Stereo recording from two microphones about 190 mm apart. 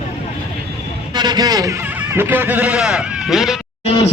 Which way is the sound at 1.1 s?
20° right (ahead or behind).